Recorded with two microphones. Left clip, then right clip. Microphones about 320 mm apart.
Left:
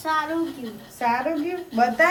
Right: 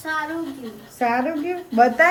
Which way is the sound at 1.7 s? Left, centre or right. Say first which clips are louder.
Right 4 dB; right.